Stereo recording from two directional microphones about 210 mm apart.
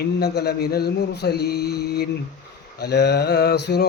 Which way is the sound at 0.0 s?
50° left (ahead or behind).